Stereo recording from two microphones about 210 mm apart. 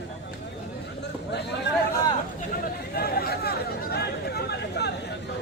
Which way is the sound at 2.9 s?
45° left (ahead or behind).